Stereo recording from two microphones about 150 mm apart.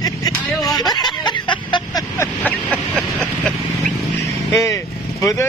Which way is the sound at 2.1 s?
10° left (ahead or behind).